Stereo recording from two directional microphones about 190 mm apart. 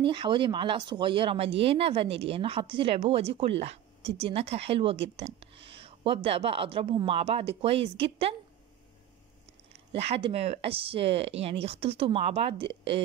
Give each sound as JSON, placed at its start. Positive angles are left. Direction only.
{"t": 0.0, "sound": "speech", "side_deg": -25}
{"t": 9.9, "sound": "speech", "side_deg": -30}